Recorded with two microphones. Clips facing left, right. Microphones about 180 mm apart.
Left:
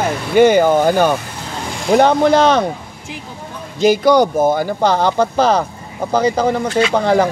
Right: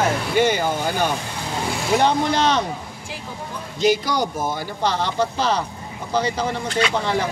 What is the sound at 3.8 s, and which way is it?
Speech, 55° left (ahead or behind).